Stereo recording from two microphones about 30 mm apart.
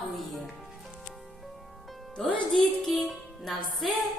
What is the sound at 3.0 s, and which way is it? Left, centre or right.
Music, centre.